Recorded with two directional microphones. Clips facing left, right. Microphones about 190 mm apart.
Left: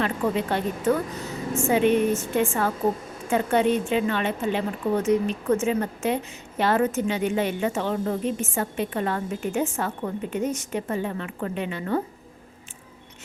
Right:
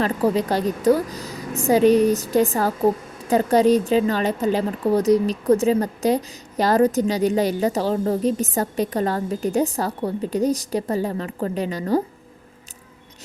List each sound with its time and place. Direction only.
0.0 s a woman's voice: 35° right (ahead or behind)